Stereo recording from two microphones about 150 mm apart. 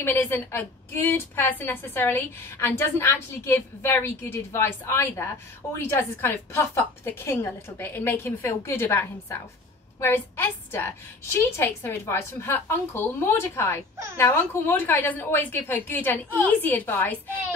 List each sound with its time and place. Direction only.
0.0 s a woman's voice: 15° left (ahead or behind)